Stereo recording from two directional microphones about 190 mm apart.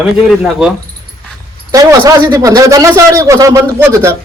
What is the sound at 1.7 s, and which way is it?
A man's voice, 20° right (ahead or behind).